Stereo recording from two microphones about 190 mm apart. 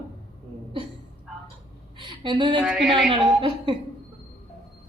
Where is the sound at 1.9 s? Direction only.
25° right (ahead or behind).